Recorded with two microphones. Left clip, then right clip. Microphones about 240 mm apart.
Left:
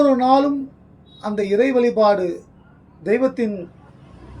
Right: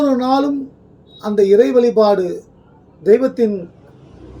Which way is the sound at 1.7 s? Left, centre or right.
Centre.